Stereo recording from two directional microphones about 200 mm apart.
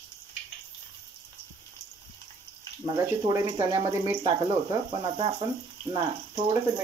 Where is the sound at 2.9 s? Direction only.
15° right (ahead or behind).